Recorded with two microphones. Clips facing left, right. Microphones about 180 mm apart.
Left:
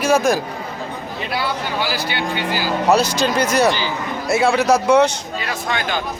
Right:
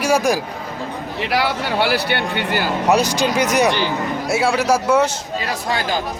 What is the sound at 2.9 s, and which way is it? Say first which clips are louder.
Speech: even; 15° right (ahead or behind).